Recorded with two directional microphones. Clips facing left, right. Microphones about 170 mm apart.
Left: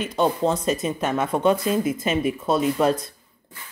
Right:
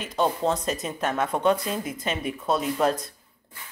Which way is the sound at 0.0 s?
Centre (ahead or behind).